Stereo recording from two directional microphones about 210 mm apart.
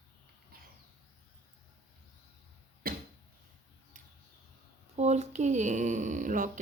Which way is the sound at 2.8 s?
45° right (ahead or behind).